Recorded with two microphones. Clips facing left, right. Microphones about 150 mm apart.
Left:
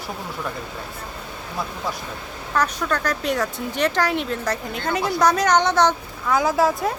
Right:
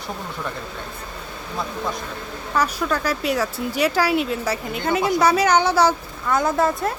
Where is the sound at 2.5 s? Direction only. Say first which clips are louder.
Right 1 dB; 5° right (ahead or behind).